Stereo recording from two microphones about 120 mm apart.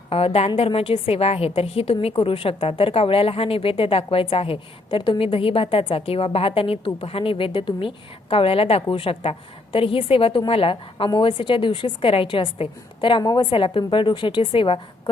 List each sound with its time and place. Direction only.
0.1 s a woman's voice: 55° left (ahead or behind)